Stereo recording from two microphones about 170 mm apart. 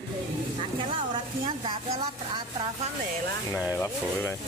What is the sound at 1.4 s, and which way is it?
Speech, 30° right (ahead or behind).